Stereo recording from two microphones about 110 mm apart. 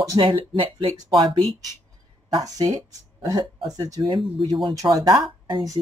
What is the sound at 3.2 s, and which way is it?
Speech, 35° right (ahead or behind).